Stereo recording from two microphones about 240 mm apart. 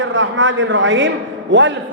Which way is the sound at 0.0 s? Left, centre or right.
Right.